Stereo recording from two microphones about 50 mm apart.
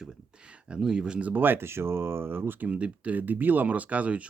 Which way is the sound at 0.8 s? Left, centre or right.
Centre.